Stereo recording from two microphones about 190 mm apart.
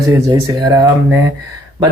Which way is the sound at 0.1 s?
20° right (ahead or behind).